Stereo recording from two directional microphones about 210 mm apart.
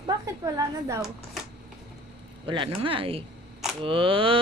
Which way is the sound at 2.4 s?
25° right (ahead or behind).